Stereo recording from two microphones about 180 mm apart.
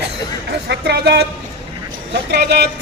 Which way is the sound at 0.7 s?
65° right (ahead or behind).